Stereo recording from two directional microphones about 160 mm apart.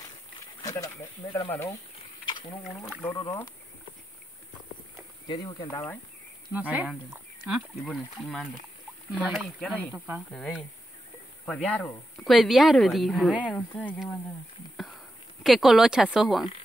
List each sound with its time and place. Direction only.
0.6 s speech: 20° left (ahead or behind)
3.0 s speech: 20° left (ahead or behind)
5.3 s speech: 30° left (ahead or behind)
6.5 s a woman's voice: 10° right (ahead or behind)
9.9 s speech: 10° right (ahead or behind)
10.3 s a woman's voice: 5° left (ahead or behind)
15.4 s a woman's voice: centre (ahead or behind)